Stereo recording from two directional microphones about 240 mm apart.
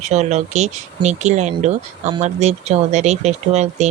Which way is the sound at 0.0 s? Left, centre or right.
Right.